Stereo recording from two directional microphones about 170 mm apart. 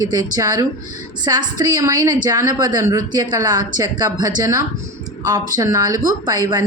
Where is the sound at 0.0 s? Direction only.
20° right (ahead or behind).